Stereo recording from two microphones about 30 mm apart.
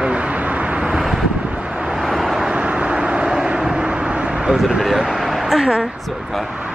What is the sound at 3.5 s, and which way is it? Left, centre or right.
Vehicle, right.